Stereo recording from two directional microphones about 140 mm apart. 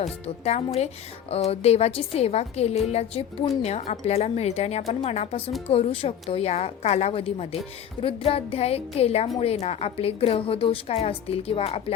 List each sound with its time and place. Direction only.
0.0 s a woman's voice: 50° left (ahead or behind)